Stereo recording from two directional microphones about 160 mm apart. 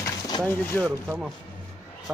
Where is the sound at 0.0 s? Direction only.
25° left (ahead or behind).